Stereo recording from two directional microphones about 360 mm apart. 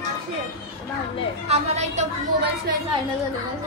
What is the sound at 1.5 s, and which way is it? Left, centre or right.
Music, centre.